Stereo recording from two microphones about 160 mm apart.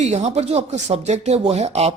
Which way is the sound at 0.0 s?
45° right (ahead or behind).